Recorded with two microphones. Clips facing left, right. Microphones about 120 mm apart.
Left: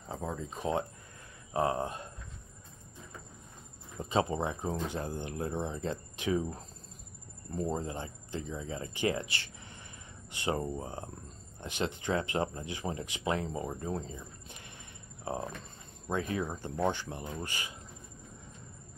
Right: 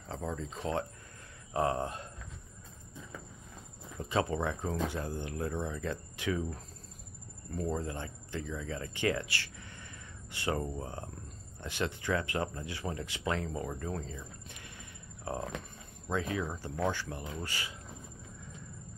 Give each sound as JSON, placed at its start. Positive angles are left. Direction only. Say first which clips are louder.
{"t": 0.1, "sound": "speech", "louder": "even", "side_deg": 10}
{"t": 4.0, "sound": "speech", "louder": "left 1 dB", "side_deg": 20}
{"t": 16.2, "sound": "speech", "louder": "left 1 dB", "side_deg": 40}
{"t": 16.4, "sound": "speech", "louder": "left 2 dB", "side_deg": 20}